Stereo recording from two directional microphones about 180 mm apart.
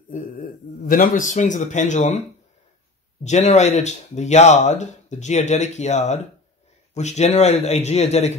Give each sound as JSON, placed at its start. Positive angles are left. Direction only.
{"t": 0.1, "sound": "speech", "side_deg": 50}
{"t": 3.3, "sound": "speech", "side_deg": 40}